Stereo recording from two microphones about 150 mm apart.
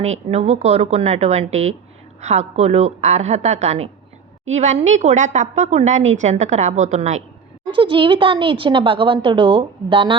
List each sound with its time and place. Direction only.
0.0 s a woman's voice: 45° right (ahead or behind)
7.7 s speech: 35° right (ahead or behind)